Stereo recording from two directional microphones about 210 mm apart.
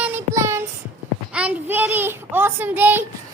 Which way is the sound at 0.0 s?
10° right (ahead or behind).